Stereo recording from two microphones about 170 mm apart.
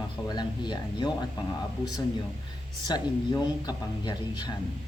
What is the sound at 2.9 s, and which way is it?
Speech, 25° left (ahead or behind).